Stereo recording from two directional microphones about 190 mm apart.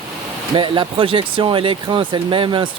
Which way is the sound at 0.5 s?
25° right (ahead or behind).